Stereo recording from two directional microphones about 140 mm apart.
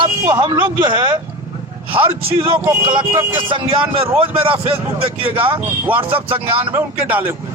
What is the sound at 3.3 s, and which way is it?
A man's voice, 35° right (ahead or behind).